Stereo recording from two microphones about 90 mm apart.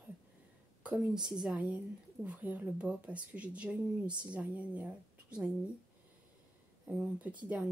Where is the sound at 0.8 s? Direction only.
5° right (ahead or behind).